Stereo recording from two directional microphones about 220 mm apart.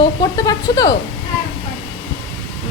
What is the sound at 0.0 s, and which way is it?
Speech, 15° left (ahead or behind).